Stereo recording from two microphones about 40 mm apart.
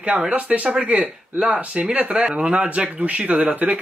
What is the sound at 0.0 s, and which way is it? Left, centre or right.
Speech, right.